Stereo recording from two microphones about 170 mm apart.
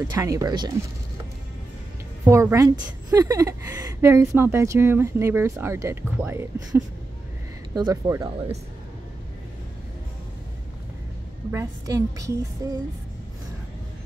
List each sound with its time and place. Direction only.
0.1 s a woman's voice: 15° right (ahead or behind)
2.2 s a woman's voice: 15° right (ahead or behind)
11.5 s a woman's voice: 20° right (ahead or behind)